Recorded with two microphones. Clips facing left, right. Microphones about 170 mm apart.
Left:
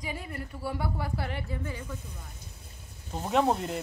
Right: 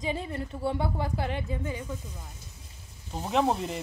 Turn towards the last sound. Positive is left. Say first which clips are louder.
# even
turn(degrees=0)  # may be behind; listen again after turning